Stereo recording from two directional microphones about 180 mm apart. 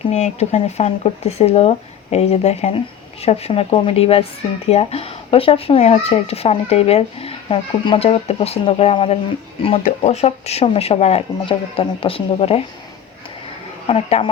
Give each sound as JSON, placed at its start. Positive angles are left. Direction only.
{"t": 0.1, "sound": "speech", "side_deg": 35}
{"t": 13.8, "sound": "speech", "side_deg": 35}